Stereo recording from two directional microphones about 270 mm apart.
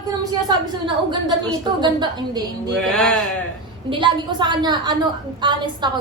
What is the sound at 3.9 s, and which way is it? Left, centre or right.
A woman's voice, centre.